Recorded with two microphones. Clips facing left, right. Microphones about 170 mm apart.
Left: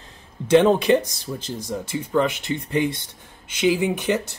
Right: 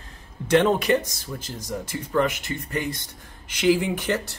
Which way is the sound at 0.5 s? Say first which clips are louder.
Left 4 dB; 15° left (ahead or behind).